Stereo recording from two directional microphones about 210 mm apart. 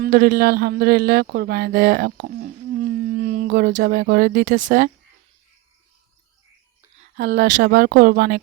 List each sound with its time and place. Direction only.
0.0 s speech: 45° right (ahead or behind)
7.2 s speech: 50° right (ahead or behind)